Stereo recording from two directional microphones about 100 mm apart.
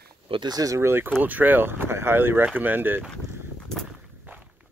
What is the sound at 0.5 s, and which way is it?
Speech, 35° right (ahead or behind).